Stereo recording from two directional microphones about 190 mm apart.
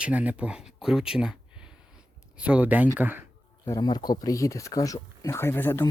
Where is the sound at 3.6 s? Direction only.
20° left (ahead or behind).